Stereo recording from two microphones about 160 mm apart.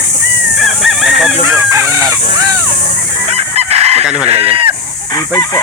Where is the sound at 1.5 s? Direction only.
20° right (ahead or behind).